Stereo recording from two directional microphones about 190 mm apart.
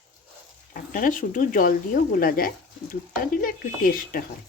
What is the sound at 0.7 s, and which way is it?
Speech, 45° left (ahead or behind).